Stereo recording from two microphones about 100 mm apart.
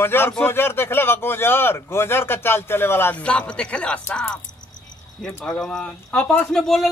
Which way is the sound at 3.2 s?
10° left (ahead or behind).